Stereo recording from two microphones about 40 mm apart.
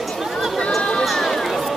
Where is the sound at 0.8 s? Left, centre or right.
Centre.